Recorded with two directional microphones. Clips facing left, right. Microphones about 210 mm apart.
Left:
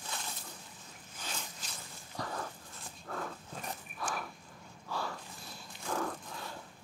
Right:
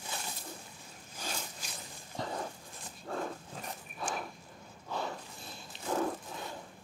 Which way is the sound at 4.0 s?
25° right (ahead or behind).